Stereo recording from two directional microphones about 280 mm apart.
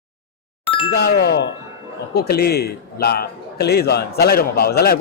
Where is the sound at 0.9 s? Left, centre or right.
Left.